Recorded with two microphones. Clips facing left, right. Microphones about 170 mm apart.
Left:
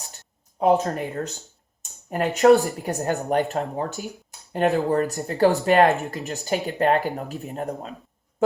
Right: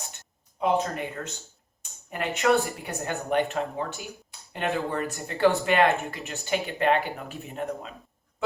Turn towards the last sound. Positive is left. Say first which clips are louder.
# left 3 dB
turn(degrees=40)  # may be behind; listen again after turning